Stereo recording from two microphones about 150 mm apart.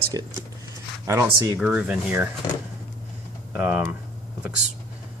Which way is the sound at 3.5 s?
5° right (ahead or behind).